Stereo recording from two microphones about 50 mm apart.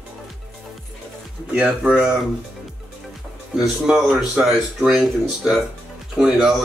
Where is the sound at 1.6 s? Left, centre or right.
Right.